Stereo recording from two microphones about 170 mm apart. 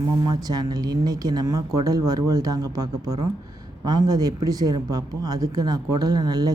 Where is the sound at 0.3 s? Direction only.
25° right (ahead or behind).